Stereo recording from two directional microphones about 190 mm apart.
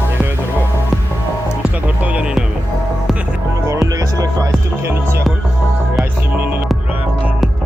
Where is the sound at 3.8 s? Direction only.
20° right (ahead or behind).